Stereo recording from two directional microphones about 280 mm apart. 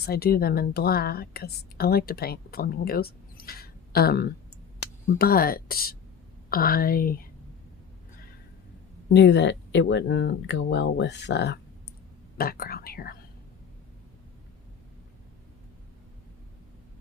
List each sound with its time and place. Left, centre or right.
0.0 s a woman's voice: left
9.1 s a woman's voice: left